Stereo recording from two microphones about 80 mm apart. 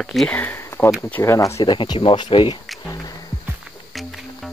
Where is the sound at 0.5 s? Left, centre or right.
Left.